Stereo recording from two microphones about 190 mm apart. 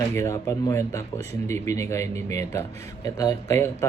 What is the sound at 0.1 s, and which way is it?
Speech, 15° left (ahead or behind).